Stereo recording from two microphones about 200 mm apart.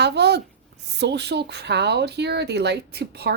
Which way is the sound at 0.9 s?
60° right (ahead or behind).